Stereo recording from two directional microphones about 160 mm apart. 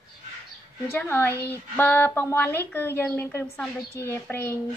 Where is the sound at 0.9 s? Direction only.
15° left (ahead or behind).